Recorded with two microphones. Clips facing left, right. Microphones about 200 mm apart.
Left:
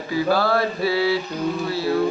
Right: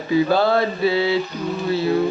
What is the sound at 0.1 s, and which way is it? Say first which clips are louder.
Mantra: right 3 dB; 20° right (ahead or behind).